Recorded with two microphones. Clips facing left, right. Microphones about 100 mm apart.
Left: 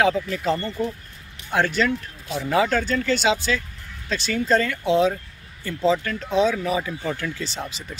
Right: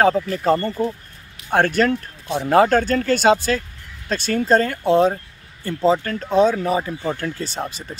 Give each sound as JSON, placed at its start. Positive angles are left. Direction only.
{"t": 0.0, "sound": "speech", "side_deg": -40}
{"t": 1.5, "sound": "speech", "side_deg": -50}